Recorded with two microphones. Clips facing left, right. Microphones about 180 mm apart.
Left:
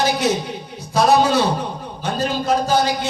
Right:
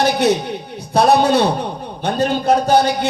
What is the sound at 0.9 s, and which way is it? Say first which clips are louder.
A man's voice: right 2 dB; 60° right (ahead or behind).